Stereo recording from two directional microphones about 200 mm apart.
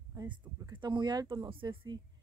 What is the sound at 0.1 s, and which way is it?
Speech, 15° right (ahead or behind).